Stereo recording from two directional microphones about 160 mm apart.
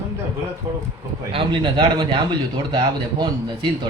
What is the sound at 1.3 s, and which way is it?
A man's voice, 30° right (ahead or behind).